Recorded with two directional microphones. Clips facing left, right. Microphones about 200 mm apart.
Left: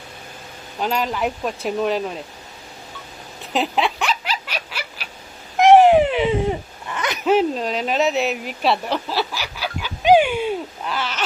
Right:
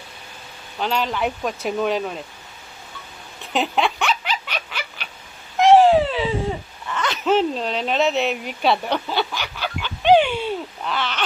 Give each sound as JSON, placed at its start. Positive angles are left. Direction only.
{"t": 0.8, "sound": "speech", "side_deg": 5}
{"t": 3.5, "sound": "a sound", "side_deg": 0}
{"t": 5.6, "sound": "baby cry", "side_deg": 20}
{"t": 6.9, "sound": "speech", "side_deg": 15}